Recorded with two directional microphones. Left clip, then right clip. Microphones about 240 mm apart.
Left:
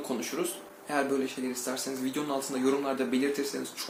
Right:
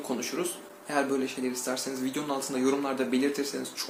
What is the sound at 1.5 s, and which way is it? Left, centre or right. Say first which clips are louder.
Speech: right 2 dB; centre.